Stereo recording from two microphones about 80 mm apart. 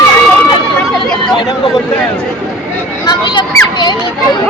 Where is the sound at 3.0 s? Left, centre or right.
Left.